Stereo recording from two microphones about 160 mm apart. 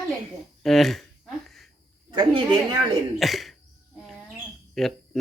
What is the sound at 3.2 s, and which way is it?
Speech, centre (ahead or behind).